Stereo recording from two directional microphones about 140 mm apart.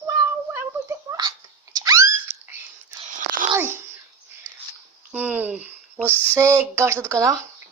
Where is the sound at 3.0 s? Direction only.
65° right (ahead or behind).